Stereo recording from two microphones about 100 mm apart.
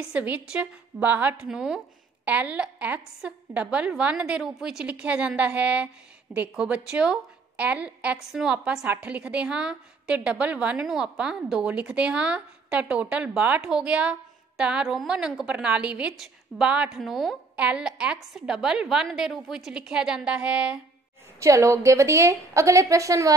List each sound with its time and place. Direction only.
0.1 s a woman's voice: 15° right (ahead or behind)
1.4 s a woman's voice: 5° right (ahead or behind)
21.4 s a woman's voice: 30° right (ahead or behind)